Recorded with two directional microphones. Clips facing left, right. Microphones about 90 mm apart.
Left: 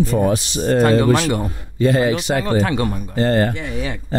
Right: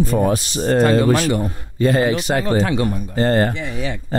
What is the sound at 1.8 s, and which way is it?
A man's voice, 45° right (ahead or behind).